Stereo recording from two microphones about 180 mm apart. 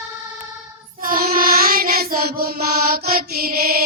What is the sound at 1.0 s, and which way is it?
Mantra, 50° right (ahead or behind).